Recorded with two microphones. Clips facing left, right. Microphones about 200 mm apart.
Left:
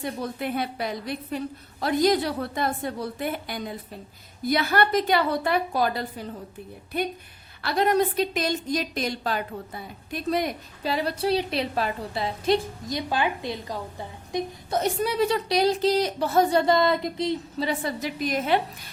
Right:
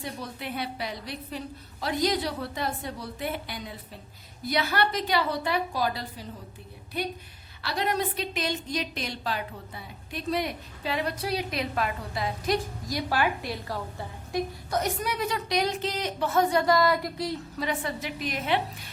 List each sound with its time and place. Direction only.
0.0 s a woman's voice: 50° left (ahead or behind); by 17.7 s 20° left (ahead or behind)
17.7 s a woman's voice: 40° left (ahead or behind)